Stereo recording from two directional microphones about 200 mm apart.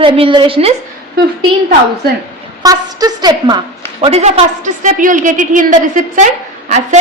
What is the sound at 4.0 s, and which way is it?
A woman's voice, 30° right (ahead or behind).